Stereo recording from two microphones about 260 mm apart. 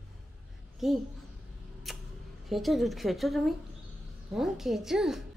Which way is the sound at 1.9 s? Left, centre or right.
Centre.